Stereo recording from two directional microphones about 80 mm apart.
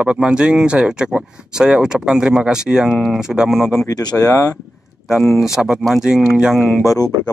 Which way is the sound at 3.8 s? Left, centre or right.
Left.